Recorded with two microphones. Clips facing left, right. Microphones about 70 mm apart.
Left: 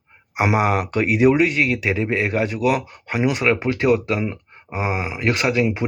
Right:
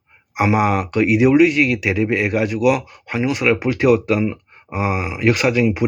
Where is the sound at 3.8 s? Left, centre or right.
Left.